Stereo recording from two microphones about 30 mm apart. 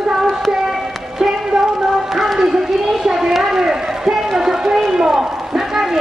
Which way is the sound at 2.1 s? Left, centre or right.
Centre.